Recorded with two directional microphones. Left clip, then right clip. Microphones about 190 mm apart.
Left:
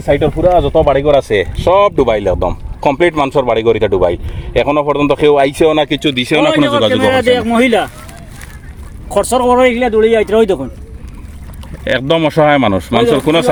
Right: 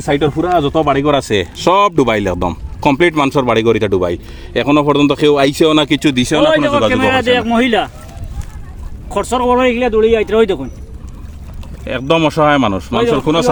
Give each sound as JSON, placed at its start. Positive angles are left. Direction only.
{"t": 0.6, "sound": "speech", "side_deg": -90}
{"t": 1.0, "sound": "speech", "side_deg": -40}
{"t": 6.4, "sound": "a man's voice", "side_deg": 20}
{"t": 6.8, "sound": "speech", "side_deg": 40}
{"t": 9.0, "sound": "speech", "side_deg": 35}
{"t": 12.2, "sound": "speech", "side_deg": 40}